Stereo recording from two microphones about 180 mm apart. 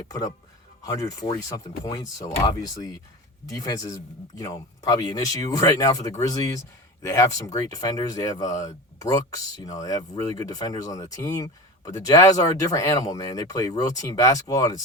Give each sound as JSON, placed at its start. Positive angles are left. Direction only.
{"t": 0.9, "sound": "speech", "side_deg": 20}